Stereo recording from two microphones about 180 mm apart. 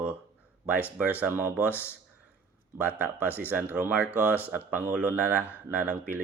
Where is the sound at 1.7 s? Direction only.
10° left (ahead or behind).